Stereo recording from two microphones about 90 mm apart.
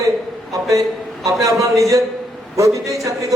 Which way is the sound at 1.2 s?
40° right (ahead or behind).